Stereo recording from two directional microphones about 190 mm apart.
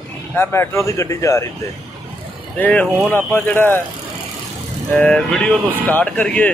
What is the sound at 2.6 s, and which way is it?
Speech, 10° left (ahead or behind).